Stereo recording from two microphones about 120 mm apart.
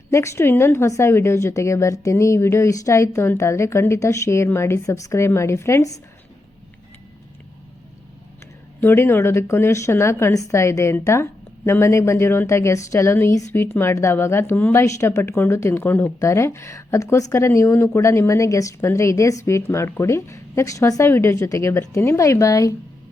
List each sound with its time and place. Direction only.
0.1 s a woman's voice: 25° left (ahead or behind)
8.8 s a woman's voice: 20° left (ahead or behind)